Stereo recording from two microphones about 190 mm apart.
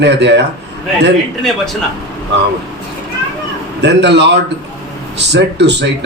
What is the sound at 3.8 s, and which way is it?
A man's voice, 65° right (ahead or behind).